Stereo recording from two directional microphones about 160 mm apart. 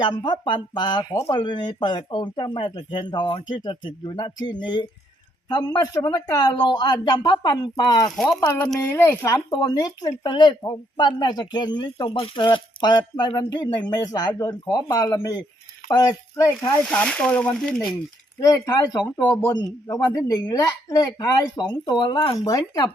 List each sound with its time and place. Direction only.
0.0 s speech: 30° left (ahead or behind)
8.5 s speech: 10° left (ahead or behind)
16.8 s speech: 5° left (ahead or behind)
18.3 s speech: 20° left (ahead or behind)
22.4 s speech: 20° left (ahead or behind)